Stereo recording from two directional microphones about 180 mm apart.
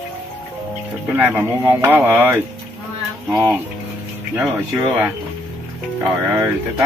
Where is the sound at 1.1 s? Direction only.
10° right (ahead or behind).